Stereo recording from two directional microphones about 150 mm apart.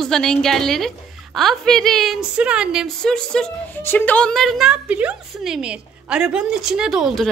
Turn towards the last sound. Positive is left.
turn(degrees=0)  # may be behind; listen again after turning